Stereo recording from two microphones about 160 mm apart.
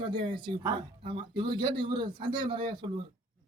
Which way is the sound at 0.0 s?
30° right (ahead or behind).